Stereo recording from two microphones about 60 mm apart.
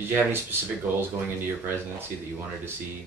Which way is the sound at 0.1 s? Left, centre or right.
Right.